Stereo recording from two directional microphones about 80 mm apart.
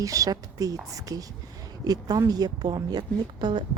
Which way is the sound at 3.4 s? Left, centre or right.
Right.